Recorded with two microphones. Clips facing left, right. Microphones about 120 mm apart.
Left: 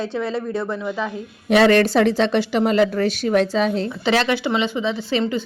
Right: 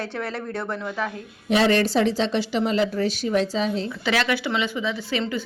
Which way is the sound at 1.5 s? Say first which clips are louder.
Left 5 dB; 65° left (ahead or behind).